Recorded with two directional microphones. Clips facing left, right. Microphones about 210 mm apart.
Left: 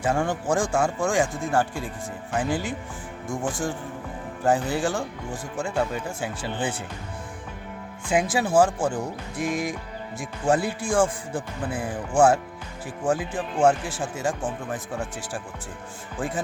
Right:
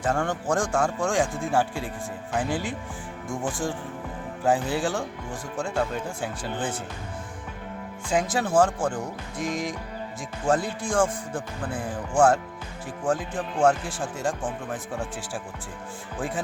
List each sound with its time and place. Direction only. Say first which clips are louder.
0.0 s speech: left 2 dB; 10° left (ahead or behind)
4.4 s speech: left 1 dB; centre (ahead or behind)
8.1 s speech: left 2 dB; 10° left (ahead or behind)
13.1 s speech: left 1 dB; 10° left (ahead or behind)